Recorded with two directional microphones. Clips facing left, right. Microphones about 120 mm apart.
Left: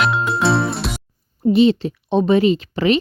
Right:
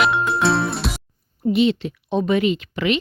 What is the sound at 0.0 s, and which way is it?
Music, centre (ahead or behind).